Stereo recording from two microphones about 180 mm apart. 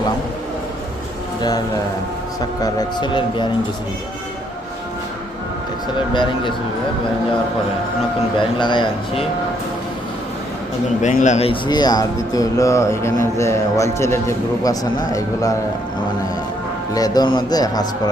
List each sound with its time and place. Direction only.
1.4 s speech: 20° left (ahead or behind)
8.5 s speech: 25° left (ahead or behind)
11.0 s speech: 40° left (ahead or behind); by 15.5 s 20° left (ahead or behind)
16.9 s speech: 20° left (ahead or behind)